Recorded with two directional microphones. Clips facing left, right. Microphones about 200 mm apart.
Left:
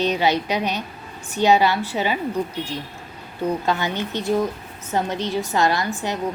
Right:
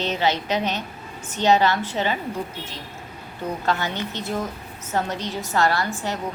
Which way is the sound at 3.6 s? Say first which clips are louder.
Left 2 dB; 15° left (ahead or behind).